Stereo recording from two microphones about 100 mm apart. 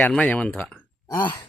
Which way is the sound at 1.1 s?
45° left (ahead or behind).